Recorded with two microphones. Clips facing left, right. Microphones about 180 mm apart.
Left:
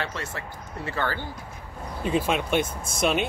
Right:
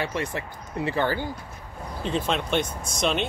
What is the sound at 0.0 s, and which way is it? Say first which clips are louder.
Speech: right 4 dB; 15° right (ahead or behind).